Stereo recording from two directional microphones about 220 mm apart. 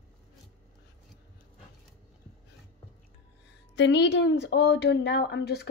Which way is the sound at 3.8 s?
50° left (ahead or behind).